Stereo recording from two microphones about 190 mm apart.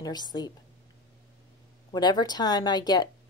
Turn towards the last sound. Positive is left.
turn(degrees=20)  # may be behind; listen again after turning